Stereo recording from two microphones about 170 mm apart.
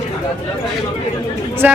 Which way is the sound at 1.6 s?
10° right (ahead or behind).